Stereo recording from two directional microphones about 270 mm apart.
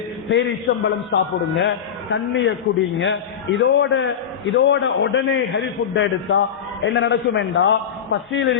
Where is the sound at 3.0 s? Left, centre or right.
Left.